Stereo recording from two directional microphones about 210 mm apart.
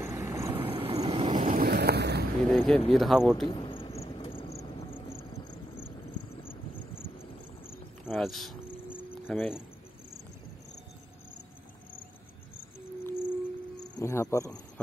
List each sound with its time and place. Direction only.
0.0 s vehicle: 15° right (ahead or behind)
0.6 s vehicle: 25° right (ahead or behind)
1.4 s boat: 45° right (ahead or behind)
2.5 s a sound: centre (ahead or behind)
2.9 s speech: centre (ahead or behind)
3.4 s cricket: 25° left (ahead or behind)
6.4 s vehicle: 25° left (ahead or behind)
8.1 s speech: centre (ahead or behind)
8.9 s cricket: 5° left (ahead or behind)
13.0 s cricket: 10° left (ahead or behind)